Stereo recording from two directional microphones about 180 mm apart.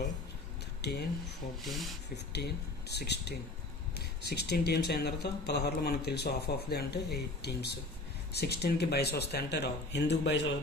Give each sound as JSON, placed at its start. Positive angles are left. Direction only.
{"t": 1.6, "sound": "speech", "side_deg": 0}
{"t": 2.3, "sound": "speech", "side_deg": 65}